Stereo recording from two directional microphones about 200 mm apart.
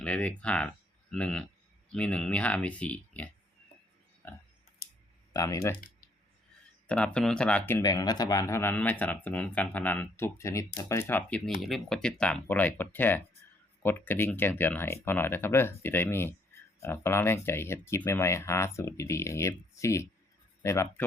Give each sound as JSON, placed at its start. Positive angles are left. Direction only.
{"t": 0.0, "sound": "speech", "side_deg": 5}
{"t": 5.3, "sound": "speech", "side_deg": 15}
{"t": 6.8, "sound": "speech", "side_deg": 5}